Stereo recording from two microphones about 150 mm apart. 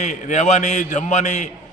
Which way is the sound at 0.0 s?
55° left (ahead or behind).